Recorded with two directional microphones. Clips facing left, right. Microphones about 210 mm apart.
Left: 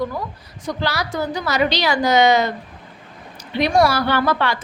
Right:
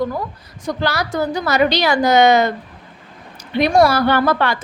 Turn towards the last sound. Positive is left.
turn(degrees=-50)  # may be behind; listen again after turning